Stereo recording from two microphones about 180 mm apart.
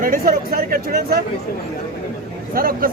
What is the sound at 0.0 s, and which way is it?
Speech, 50° right (ahead or behind).